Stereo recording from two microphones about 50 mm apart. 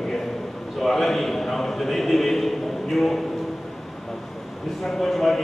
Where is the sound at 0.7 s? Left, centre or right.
Centre.